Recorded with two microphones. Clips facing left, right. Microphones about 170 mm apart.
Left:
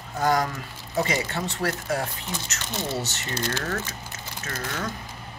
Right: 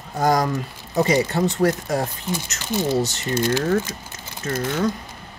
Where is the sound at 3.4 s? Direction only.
20° right (ahead or behind).